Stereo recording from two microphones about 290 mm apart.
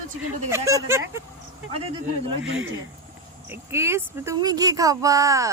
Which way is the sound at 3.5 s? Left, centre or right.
Centre.